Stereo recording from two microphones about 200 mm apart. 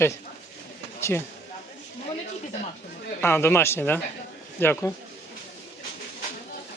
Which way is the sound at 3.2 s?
10° left (ahead or behind).